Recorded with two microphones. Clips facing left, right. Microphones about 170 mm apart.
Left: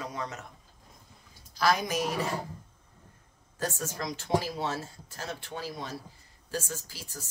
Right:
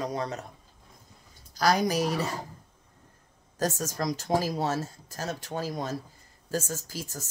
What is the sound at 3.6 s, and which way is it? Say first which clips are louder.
Speech: right 4 dB; 40° right (ahead or behind).